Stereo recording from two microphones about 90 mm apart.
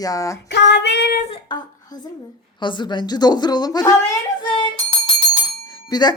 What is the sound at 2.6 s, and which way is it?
Speech, 60° left (ahead or behind).